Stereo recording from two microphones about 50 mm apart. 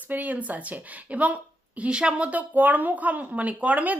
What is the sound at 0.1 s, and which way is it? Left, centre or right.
Speech, right.